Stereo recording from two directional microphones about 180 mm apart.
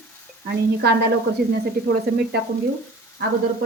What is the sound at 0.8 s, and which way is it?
Speech, 60° right (ahead or behind).